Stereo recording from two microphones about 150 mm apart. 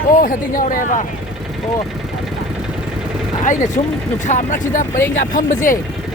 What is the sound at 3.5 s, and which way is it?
Speech, 55° left (ahead or behind).